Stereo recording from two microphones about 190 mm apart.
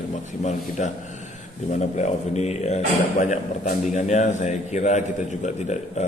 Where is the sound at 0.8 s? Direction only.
40° left (ahead or behind).